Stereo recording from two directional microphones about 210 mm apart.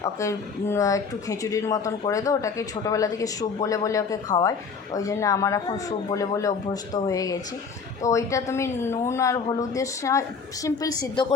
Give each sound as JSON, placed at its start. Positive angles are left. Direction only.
{"t": 0.0, "sound": "speech", "side_deg": 15}